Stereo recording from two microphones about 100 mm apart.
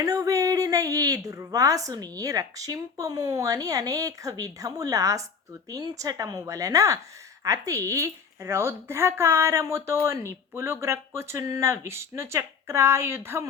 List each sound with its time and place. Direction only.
0.0 s speech: 35° right (ahead or behind)